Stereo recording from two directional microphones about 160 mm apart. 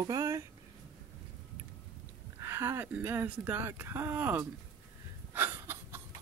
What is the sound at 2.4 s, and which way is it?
Speech, 15° right (ahead or behind).